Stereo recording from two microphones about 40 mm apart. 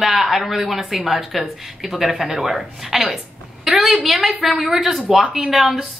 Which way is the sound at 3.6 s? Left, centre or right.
Centre.